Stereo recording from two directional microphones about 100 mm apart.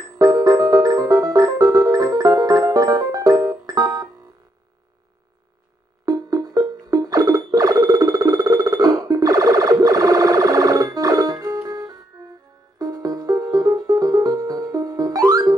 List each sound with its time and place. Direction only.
0.2 s music: 40° right (ahead or behind)
6.0 s music: 40° right (ahead or behind)